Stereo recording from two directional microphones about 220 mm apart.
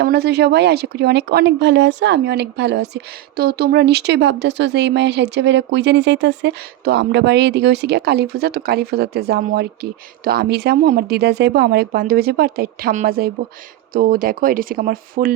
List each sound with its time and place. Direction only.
0.0 s speech: 50° right (ahead or behind)